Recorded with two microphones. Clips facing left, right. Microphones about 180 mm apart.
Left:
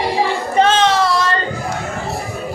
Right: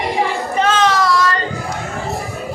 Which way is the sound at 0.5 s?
30° left (ahead or behind).